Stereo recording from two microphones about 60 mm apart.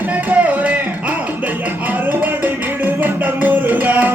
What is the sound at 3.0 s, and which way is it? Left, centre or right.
Music, right.